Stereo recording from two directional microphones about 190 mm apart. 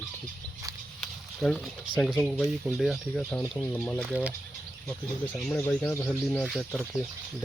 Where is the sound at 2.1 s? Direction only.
5° left (ahead or behind).